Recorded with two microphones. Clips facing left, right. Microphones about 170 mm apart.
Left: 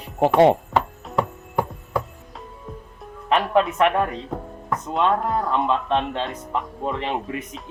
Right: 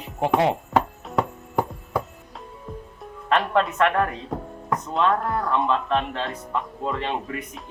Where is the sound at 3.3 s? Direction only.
15° left (ahead or behind).